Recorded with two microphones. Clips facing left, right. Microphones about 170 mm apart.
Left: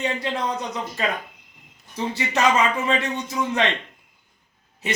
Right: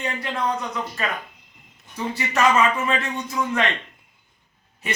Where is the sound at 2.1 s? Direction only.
20° left (ahead or behind).